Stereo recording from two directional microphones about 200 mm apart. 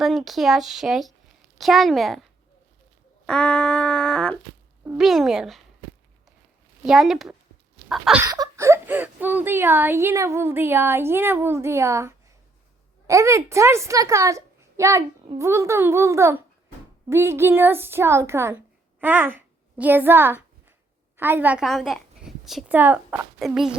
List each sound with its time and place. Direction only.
0.0 s speech: centre (ahead or behind)
3.2 s speech: 5° left (ahead or behind)
4.8 s speech: 5° right (ahead or behind)
6.8 s speech: centre (ahead or behind)
8.2 s a woman's voice: 15° right (ahead or behind)